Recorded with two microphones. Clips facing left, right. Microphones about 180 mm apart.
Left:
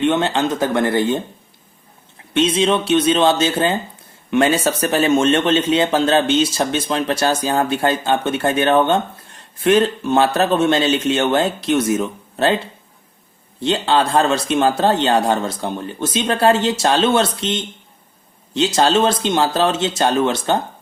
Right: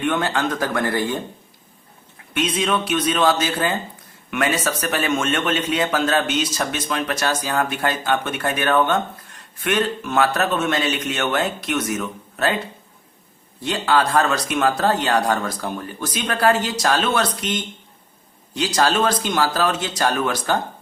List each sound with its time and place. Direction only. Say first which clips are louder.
0.0 s speech: left 4 dB; 25° left (ahead or behind)
2.3 s speech: left 5 dB; 25° left (ahead or behind)
13.6 s speech: left 3 dB; 25° left (ahead or behind)